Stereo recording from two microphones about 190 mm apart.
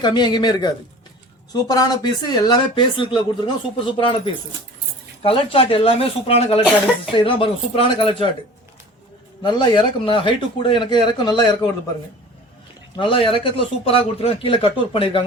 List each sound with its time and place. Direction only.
0.0 s speech: 25° left (ahead or behind)
5.2 s speech: 30° left (ahead or behind)
9.4 s speech: 25° left (ahead or behind)
13.0 s speech: 25° left (ahead or behind)